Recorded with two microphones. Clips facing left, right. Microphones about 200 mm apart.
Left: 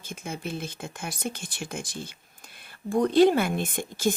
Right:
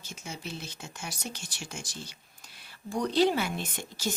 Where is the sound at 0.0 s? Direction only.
55° left (ahead or behind).